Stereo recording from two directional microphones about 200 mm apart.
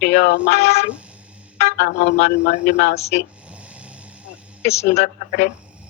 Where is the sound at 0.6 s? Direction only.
35° left (ahead or behind).